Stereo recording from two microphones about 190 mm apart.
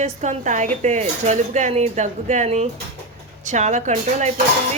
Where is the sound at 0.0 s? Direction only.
40° right (ahead or behind).